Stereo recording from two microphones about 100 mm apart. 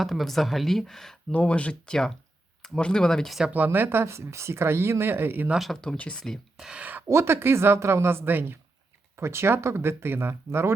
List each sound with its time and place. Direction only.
0.0 s speech: centre (ahead or behind)
3.5 s speech: 20° right (ahead or behind)
5.5 s speech: centre (ahead or behind)
6.7 s speech: 15° right (ahead or behind)
7.1 s speech: 25° right (ahead or behind)